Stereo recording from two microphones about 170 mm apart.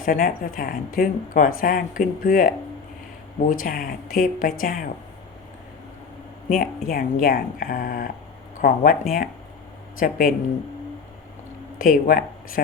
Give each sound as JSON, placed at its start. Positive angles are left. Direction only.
{"t": 0.0, "sound": "speech", "side_deg": 55}
{"t": 6.5, "sound": "speech", "side_deg": 55}
{"t": 11.8, "sound": "speech", "side_deg": 55}